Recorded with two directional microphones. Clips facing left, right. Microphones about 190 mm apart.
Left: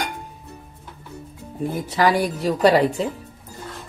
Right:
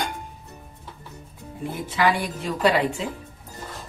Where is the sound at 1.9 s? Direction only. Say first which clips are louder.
Left 3 dB; 40° left (ahead or behind).